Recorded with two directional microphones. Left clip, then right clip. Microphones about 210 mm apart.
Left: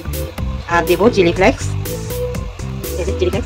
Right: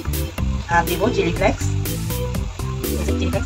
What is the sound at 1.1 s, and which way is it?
Speech, 55° left (ahead or behind).